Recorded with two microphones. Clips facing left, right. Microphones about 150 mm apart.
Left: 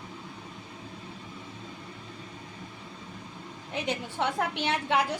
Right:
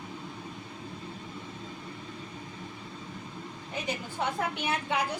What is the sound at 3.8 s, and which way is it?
A woman's voice, 75° left (ahead or behind).